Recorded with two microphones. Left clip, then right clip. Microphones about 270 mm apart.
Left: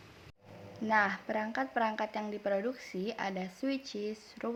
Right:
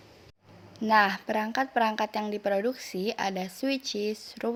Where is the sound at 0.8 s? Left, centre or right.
Right.